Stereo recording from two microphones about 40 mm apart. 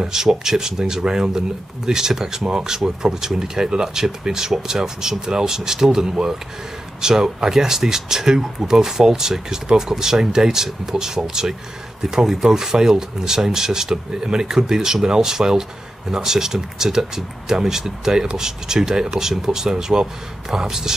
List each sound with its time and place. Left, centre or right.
0.0 s speech: centre